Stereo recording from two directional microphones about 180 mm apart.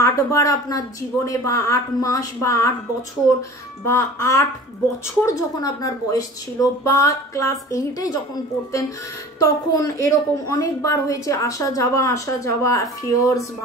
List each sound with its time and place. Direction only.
0.0 s a woman's voice: 15° left (ahead or behind)
3.8 s a woman's voice: 15° left (ahead or behind)
9.4 s a woman's voice: 20° left (ahead or behind)